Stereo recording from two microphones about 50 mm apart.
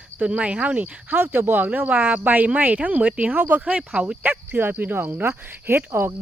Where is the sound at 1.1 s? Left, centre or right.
Right.